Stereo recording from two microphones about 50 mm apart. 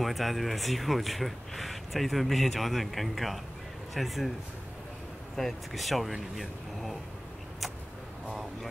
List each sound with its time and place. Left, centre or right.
0.0 s speech: centre
5.3 s speech: centre